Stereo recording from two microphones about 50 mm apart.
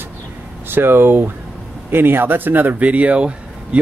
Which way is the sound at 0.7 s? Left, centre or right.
Right.